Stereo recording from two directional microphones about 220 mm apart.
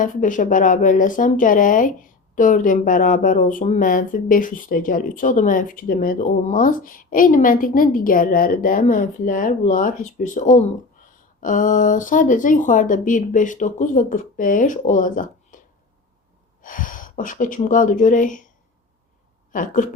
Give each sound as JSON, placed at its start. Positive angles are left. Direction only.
{"t": 0.0, "sound": "speech", "side_deg": 35}
{"t": 16.6, "sound": "speech", "side_deg": 40}
{"t": 19.5, "sound": "speech", "side_deg": 35}